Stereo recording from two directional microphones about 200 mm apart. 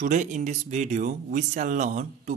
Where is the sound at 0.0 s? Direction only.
40° right (ahead or behind).